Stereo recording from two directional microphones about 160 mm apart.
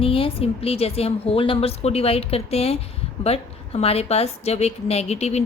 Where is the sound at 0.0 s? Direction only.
35° left (ahead or behind).